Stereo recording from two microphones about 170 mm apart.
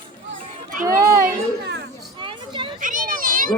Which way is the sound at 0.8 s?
65° right (ahead or behind).